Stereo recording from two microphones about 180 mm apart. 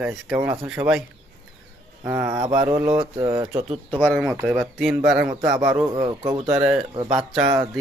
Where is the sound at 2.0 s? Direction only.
15° right (ahead or behind).